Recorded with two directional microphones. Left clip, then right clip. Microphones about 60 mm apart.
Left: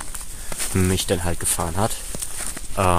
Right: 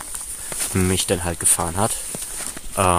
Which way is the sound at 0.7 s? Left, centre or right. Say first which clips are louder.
Right 1 dB; right.